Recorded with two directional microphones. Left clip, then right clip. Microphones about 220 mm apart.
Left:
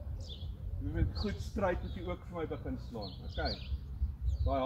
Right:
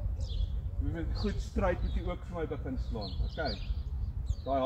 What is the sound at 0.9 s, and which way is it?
Speech, 10° right (ahead or behind).